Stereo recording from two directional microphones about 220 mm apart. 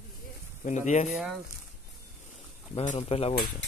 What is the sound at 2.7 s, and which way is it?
Speech, 30° left (ahead or behind).